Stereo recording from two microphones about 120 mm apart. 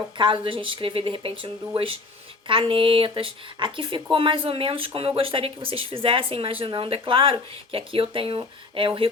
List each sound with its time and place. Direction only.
0.2 s speech: 45° right (ahead or behind)